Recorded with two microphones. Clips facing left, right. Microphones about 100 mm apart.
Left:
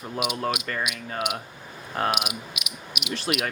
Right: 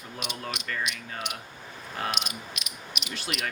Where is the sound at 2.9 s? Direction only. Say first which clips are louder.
Left 5 dB; 5° left (ahead or behind).